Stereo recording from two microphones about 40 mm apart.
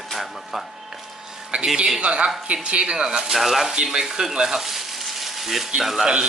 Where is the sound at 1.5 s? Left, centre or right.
Right.